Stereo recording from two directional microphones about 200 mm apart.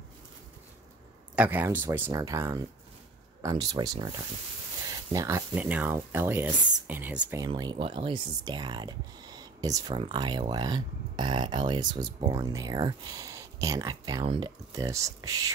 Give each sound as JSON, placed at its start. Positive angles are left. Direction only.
{"t": 1.3, "sound": "speech", "side_deg": -10}
{"t": 7.4, "sound": "speech", "side_deg": -20}